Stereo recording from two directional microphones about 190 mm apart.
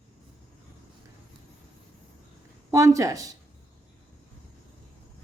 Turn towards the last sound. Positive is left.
turn(degrees=-20)  # may be behind; listen again after turning